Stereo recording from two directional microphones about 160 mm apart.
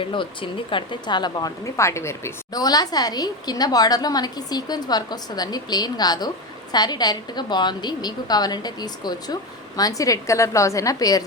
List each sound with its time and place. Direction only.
0.0 s a woman's voice: 30° left (ahead or behind)